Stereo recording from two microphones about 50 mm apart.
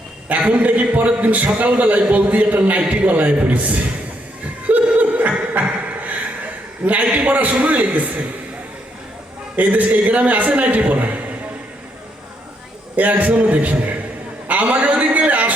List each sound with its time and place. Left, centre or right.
0.3 s a man's voice: right
4.6 s chuckle: right
9.6 s a man's voice: right
13.0 s a man's voice: right